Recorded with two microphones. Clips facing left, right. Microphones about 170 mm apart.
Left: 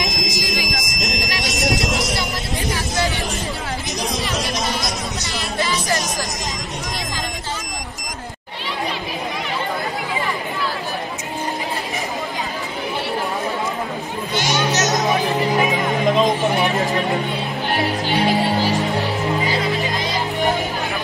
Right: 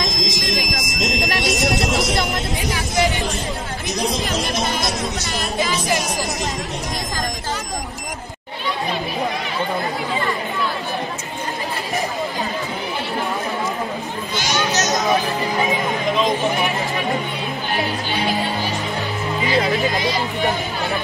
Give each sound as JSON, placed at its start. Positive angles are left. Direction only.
{"t": 0.2, "sound": "a sound", "side_deg": 0}
{"t": 0.8, "sound": "fire alarm", "side_deg": 0}
{"t": 5.6, "sound": "music", "side_deg": -15}
{"t": 14.6, "sound": "children playing", "side_deg": 20}